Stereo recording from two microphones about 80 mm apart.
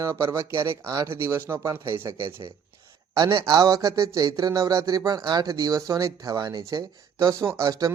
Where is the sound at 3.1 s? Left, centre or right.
Right.